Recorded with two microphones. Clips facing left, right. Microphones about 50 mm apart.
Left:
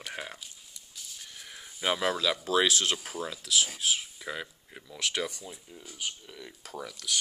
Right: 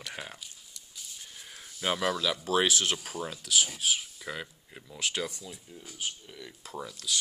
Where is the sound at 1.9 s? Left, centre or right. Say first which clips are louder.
Left 1 dB; left.